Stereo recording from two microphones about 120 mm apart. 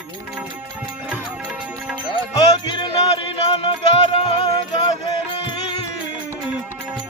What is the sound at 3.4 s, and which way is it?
Music, 40° left (ahead or behind).